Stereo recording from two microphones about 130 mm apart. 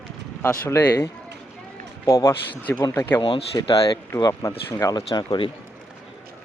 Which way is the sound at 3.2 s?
40° left (ahead or behind).